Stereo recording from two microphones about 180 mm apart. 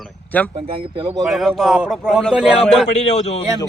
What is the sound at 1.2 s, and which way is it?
Speech, centre (ahead or behind).